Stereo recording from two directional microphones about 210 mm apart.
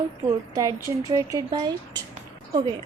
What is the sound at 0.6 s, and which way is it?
A woman's voice, 15° right (ahead or behind).